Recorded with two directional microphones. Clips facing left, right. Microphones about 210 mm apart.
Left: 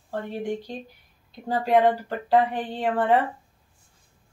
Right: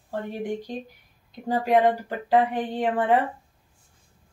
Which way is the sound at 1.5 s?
15° right (ahead or behind).